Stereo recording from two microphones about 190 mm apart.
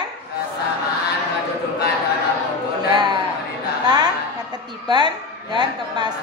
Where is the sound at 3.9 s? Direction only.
20° right (ahead or behind).